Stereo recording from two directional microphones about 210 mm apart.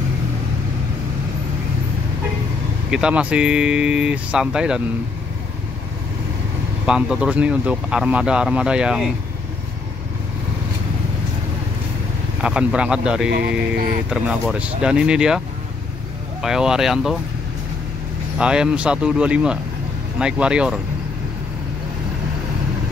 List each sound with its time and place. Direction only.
2.9 s speech: 5° right (ahead or behind)
6.9 s speech: 5° right (ahead or behind)
12.4 s speech: 5° right (ahead or behind)
13.3 s speech: 50° right (ahead or behind)
14.1 s speech: 5° right (ahead or behind)
18.4 s speech: 5° right (ahead or behind)